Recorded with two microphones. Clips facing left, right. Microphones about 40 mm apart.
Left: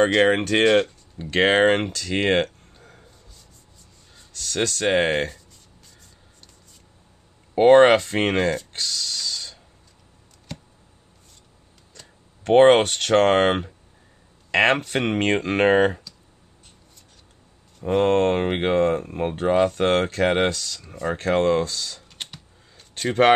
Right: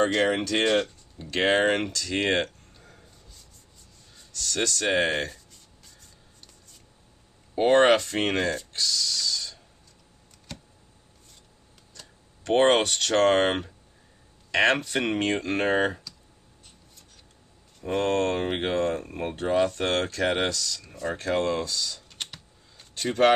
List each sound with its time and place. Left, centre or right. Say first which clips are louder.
0.0 s speech: left 5 dB; left
4.3 s speech: left 3 dB; left
7.5 s speech: left 6 dB; left
8.7 s a sound: even; left
12.4 s speech: left 6 dB; left
17.9 s speech: left 6 dB; left
22.1 s a sound: left 1 dB; centre
23.0 s speech: left 3 dB; left